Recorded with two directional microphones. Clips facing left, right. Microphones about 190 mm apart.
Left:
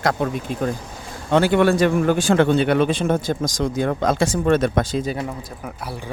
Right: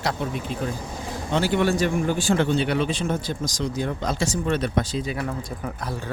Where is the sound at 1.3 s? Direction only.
60° left (ahead or behind).